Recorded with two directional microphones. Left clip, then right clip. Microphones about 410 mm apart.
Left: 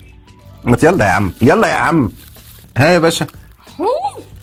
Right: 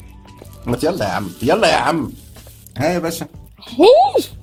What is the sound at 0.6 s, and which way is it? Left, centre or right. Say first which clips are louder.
Speech: left 8 dB; left.